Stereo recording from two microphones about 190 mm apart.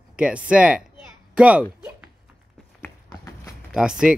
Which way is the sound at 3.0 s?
15° left (ahead or behind).